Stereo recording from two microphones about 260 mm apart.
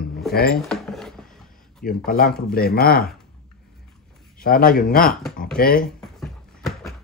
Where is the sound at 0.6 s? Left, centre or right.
Centre.